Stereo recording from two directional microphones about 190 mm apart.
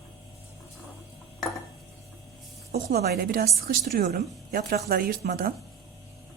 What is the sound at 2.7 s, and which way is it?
A woman's voice, 55° right (ahead or behind).